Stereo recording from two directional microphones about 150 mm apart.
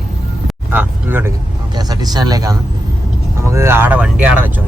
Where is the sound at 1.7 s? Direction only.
25° right (ahead or behind); by 4.4 s 5° right (ahead or behind).